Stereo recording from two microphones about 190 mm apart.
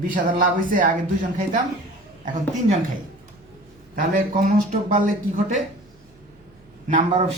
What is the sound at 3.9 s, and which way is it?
Speech, 45° right (ahead or behind).